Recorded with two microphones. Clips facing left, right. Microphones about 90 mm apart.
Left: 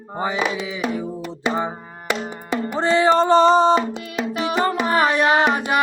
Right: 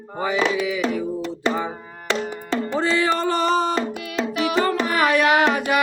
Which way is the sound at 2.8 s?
30° left (ahead or behind).